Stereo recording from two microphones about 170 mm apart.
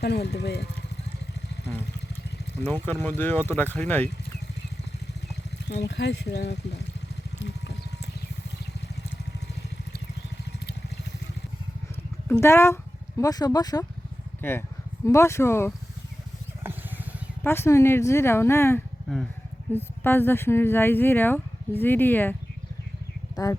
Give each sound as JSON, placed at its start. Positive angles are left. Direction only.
{"t": 0.0, "sound": "speech", "side_deg": 75}
{"t": 2.6, "sound": "speech", "side_deg": 10}
{"t": 5.6, "sound": "speech", "side_deg": 80}
{"t": 12.3, "sound": "speech", "side_deg": 15}
{"t": 17.4, "sound": "speech", "side_deg": 15}
{"t": 19.0, "sound": "speech", "side_deg": 0}
{"t": 19.7, "sound": "speech", "side_deg": 10}